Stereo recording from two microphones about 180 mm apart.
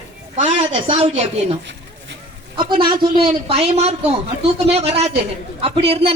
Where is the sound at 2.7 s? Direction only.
25° right (ahead or behind).